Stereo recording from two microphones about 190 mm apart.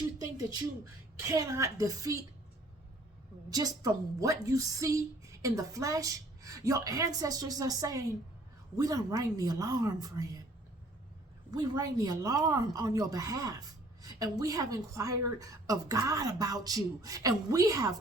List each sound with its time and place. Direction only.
1.3 s a woman's voice: 15° right (ahead or behind)
3.5 s a woman's voice: 20° right (ahead or behind)
11.5 s a woman's voice: 20° right (ahead or behind)